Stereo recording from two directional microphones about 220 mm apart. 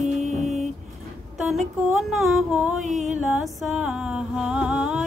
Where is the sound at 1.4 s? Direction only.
Centre (ahead or behind).